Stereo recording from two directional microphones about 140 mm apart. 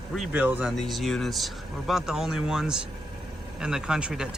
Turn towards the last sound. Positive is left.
turn(degrees=-5)  # may be behind; listen again after turning